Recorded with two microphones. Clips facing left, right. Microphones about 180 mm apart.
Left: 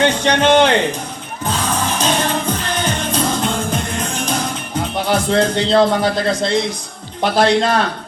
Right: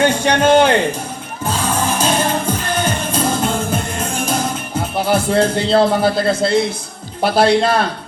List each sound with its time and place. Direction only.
0.0 s a man's voice: 10° right (ahead or behind)
1.5 s music: 10° right (ahead or behind)
7.2 s a man's voice: 10° right (ahead or behind)